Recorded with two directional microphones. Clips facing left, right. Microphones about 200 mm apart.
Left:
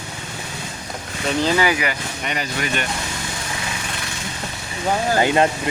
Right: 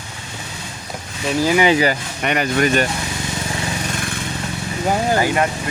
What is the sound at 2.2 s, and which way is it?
Speech, 60° right (ahead or behind).